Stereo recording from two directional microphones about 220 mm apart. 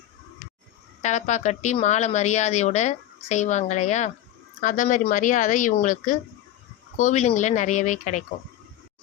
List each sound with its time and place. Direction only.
1.0 s a woman's voice: 30° left (ahead or behind)